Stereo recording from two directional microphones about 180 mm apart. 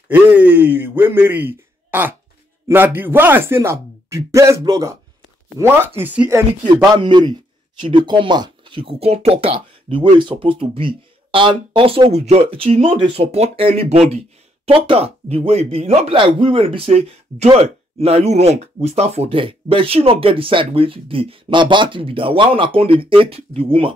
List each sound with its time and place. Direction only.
0.1 s speech: 10° right (ahead or behind)
6.6 s a man's voice: 25° right (ahead or behind)